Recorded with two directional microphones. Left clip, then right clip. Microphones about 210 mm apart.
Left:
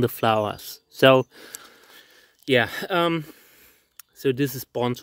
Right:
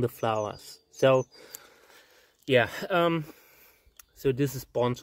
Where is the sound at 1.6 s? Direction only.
40° left (ahead or behind).